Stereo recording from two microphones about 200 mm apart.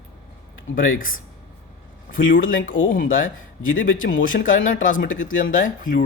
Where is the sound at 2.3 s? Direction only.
45° left (ahead or behind).